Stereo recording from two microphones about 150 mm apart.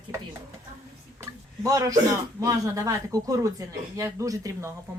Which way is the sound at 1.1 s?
20° right (ahead or behind).